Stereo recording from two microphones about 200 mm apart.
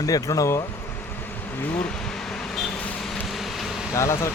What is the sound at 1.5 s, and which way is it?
Vehicle, 10° left (ahead or behind).